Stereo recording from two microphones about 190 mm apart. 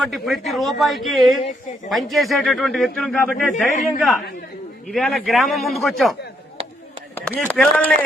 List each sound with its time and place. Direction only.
0.0 s speech: centre (ahead or behind)
7.3 s speech: 5° left (ahead or behind)